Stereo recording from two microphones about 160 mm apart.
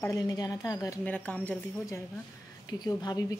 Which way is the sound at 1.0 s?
10° left (ahead or behind).